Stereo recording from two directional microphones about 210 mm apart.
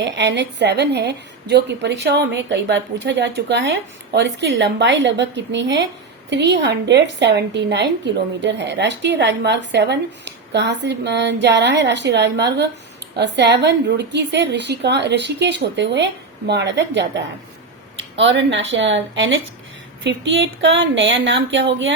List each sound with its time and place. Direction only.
0.0 s a woman's voice: 55° right (ahead or behind)